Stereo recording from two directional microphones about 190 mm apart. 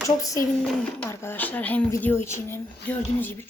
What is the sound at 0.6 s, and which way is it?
Speech, 5° left (ahead or behind).